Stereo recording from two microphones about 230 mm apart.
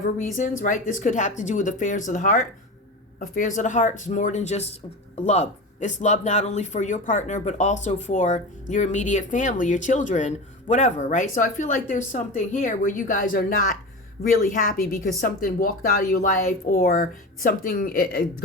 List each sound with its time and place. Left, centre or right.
0.0 s speech: left